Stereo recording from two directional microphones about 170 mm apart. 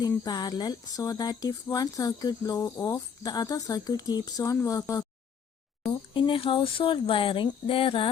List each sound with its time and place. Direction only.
0.3 s speech: 25° left (ahead or behind)